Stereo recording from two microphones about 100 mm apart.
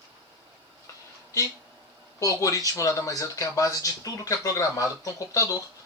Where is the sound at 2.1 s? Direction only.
35° left (ahead or behind).